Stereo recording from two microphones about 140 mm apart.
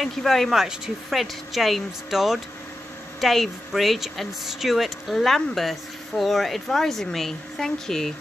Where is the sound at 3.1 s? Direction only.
Centre (ahead or behind).